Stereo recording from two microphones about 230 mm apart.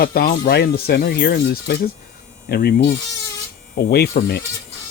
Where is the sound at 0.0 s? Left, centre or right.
Left.